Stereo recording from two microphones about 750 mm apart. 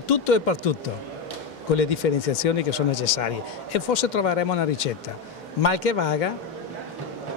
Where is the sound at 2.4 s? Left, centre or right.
Left.